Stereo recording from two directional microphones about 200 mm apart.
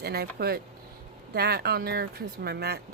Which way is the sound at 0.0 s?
50° right (ahead or behind).